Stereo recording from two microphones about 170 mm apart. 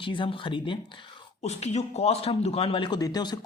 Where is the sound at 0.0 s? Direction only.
30° left (ahead or behind).